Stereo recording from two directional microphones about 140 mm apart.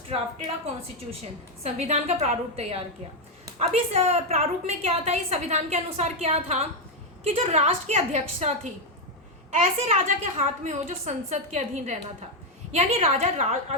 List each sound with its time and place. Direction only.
0.1 s a woman's voice: 50° right (ahead or behind)